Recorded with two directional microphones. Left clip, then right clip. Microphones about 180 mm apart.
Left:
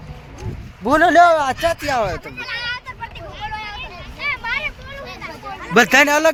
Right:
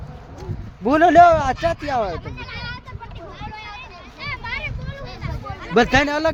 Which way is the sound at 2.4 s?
30° left (ahead or behind).